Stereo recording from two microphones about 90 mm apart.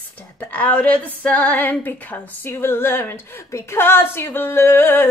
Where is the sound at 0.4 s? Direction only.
15° left (ahead or behind).